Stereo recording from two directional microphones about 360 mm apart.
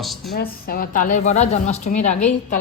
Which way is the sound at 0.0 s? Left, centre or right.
Centre.